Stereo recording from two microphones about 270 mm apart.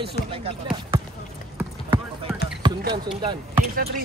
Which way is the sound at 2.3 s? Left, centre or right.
Centre.